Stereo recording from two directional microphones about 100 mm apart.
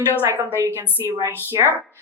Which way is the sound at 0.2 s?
25° right (ahead or behind).